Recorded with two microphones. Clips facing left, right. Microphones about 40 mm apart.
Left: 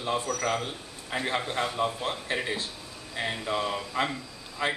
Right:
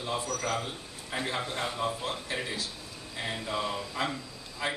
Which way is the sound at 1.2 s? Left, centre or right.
Left.